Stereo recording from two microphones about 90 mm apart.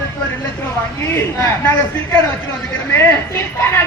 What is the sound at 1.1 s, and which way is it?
A woman's voice, 25° left (ahead or behind).